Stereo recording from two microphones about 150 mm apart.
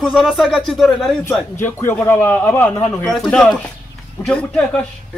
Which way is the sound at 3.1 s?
Centre (ahead or behind).